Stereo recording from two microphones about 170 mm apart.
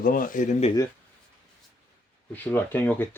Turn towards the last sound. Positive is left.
turn(degrees=10)  # may be behind; listen again after turning